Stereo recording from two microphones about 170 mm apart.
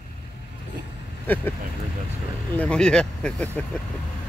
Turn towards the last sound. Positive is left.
turn(degrees=10)  # may be behind; listen again after turning